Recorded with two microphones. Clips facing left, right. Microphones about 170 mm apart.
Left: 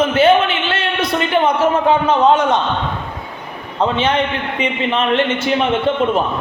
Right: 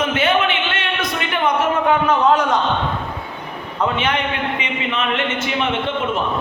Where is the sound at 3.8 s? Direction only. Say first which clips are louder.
Left 4 dB; 30° left (ahead or behind).